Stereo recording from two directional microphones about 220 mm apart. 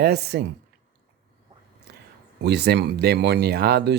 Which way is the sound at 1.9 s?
45° right (ahead or behind).